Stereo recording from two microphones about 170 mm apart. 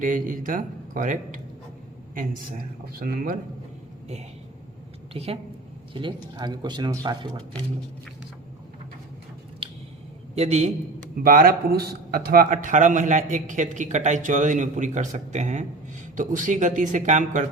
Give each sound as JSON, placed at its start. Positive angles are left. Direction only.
{"t": 0.0, "sound": "a man's voice", "side_deg": -50}
{"t": 2.1, "sound": "speech", "side_deg": -60}
{"t": 5.1, "sound": "a man's voice", "side_deg": -35}
{"t": 9.6, "sound": "a sound", "side_deg": -30}
{"t": 10.3, "sound": "a man's voice", "side_deg": -40}
{"t": 11.2, "sound": "a man's voice", "side_deg": -60}